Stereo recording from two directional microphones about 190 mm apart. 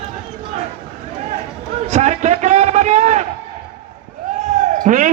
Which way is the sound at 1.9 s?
35° right (ahead or behind).